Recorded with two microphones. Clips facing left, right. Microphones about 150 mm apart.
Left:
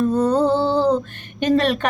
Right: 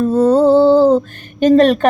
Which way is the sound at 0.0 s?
45° right (ahead or behind).